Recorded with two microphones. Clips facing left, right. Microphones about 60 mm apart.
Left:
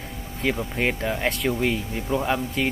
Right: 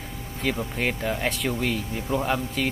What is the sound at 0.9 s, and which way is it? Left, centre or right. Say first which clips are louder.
Speech: left 1 dB; centre.